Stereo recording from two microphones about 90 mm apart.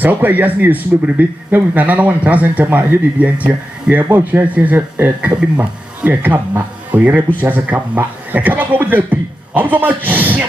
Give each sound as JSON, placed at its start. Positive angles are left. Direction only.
{"t": 0.0, "sound": "speech", "side_deg": -20}